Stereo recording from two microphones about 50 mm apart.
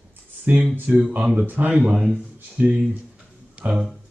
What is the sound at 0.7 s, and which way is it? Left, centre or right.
Speech, right.